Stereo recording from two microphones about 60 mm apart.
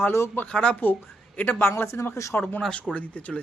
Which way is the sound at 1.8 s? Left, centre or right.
Left.